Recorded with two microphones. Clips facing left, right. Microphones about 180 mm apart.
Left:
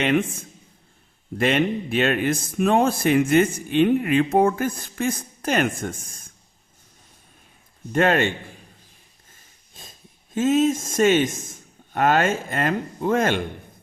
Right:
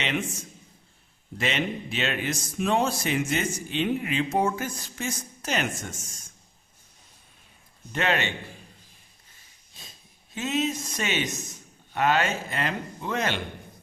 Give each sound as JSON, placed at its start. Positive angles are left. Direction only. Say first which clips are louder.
{"t": 0.0, "sound": "a man's voice", "louder": "left 9 dB", "side_deg": 55}
{"t": 7.9, "sound": "a man's voice", "louder": "left 7 dB", "side_deg": 45}
{"t": 9.3, "sound": "a sound", "louder": "left 6 dB", "side_deg": 45}
{"t": 10.3, "sound": "a man's voice", "louder": "left 9 dB", "side_deg": 45}